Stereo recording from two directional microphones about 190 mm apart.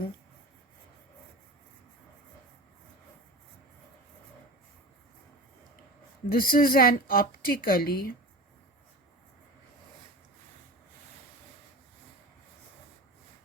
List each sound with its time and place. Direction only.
6.2 s a woman's voice: 50° left (ahead or behind)